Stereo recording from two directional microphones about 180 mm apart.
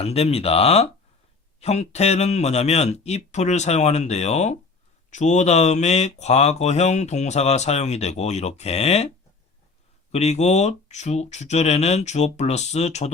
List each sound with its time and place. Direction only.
0.0 s speech: 35° left (ahead or behind)
10.1 s speech: 35° left (ahead or behind)